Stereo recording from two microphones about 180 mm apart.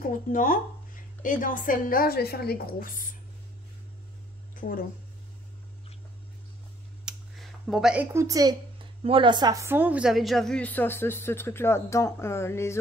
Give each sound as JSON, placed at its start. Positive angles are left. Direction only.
{"t": 0.3, "sound": "a woman's voice", "side_deg": 50}
{"t": 4.6, "sound": "speech", "side_deg": 50}
{"t": 7.1, "sound": "speech", "side_deg": 0}